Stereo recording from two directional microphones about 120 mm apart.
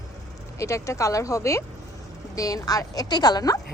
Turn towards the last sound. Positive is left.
turn(degrees=30)  # may be behind; listen again after turning